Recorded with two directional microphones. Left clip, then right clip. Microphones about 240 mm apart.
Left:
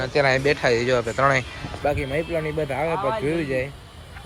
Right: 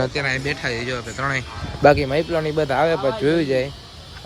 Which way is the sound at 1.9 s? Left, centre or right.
Right.